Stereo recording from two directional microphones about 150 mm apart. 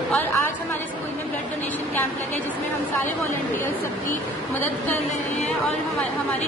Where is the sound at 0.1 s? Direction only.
10° left (ahead or behind).